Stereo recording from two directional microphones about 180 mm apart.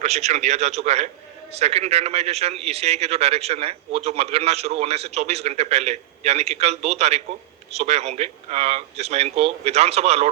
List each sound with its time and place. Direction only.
0.0 s speech: 40° right (ahead or behind)